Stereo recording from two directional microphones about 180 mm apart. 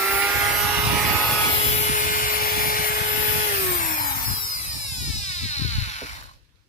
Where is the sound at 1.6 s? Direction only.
40° left (ahead or behind).